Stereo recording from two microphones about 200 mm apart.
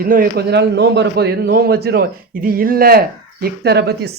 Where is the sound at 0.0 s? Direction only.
45° right (ahead or behind).